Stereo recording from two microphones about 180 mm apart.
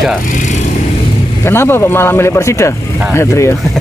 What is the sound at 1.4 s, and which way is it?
Speech, 15° left (ahead or behind).